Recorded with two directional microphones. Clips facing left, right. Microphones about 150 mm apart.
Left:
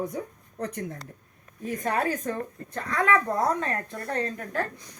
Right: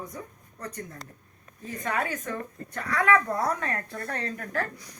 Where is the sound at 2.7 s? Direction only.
25° left (ahead or behind).